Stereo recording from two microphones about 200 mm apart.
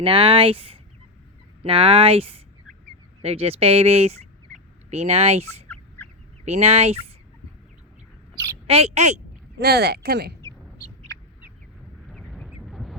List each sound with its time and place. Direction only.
0.0 s speech: 25° right (ahead or behind)
4.9 s fowl: 30° right (ahead or behind)
8.6 s fowl: 30° right (ahead or behind)
9.6 s speech: 55° right (ahead or behind)
12.0 s duck: centre (ahead or behind)